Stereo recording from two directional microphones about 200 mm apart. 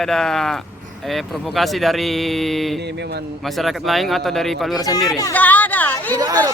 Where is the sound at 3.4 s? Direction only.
Centre (ahead or behind).